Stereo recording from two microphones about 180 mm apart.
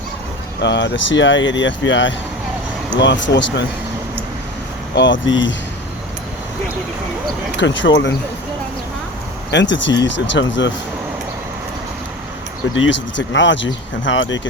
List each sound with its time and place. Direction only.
0.6 s speech: 85° left
4.9 s speech: 90° left
7.6 s speech: 90° left
9.5 s speech: 85° left
10.0 s speech: 80° left
12.7 s speech: 90° left